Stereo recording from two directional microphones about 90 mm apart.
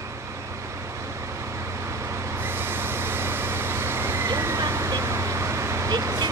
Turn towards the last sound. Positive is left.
turn(degrees=-45)  # may be behind; listen again after turning